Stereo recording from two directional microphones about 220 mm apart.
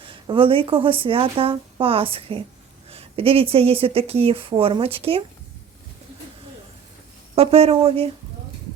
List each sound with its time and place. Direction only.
0.0 s speech: 25° right (ahead or behind)
7.3 s speech: 25° right (ahead or behind)